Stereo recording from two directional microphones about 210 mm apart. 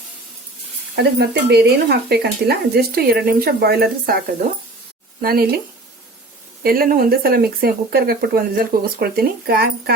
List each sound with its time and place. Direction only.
0.9 s speech: 50° right (ahead or behind)
5.2 s speech: 45° right (ahead or behind)
6.6 s speech: 45° right (ahead or behind)